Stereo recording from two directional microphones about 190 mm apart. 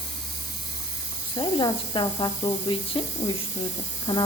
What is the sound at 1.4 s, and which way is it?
Speech, 25° left (ahead or behind).